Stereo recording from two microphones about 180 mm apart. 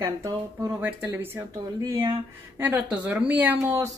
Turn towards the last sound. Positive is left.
turn(degrees=-10)  # may be behind; listen again after turning